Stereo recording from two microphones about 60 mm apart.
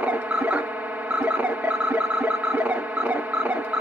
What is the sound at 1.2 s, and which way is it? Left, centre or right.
Music, right.